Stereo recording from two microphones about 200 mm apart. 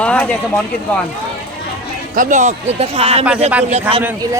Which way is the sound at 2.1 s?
40° right (ahead or behind).